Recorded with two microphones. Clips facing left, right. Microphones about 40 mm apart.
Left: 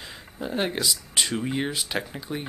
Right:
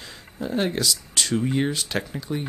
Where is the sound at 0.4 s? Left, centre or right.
Centre.